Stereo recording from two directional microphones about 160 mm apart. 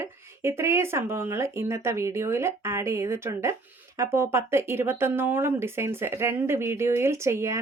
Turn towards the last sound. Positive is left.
turn(degrees=-20)  # may be behind; listen again after turning